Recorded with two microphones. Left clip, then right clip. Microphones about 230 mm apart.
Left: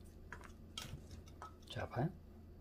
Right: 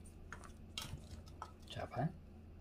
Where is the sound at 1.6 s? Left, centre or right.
Left.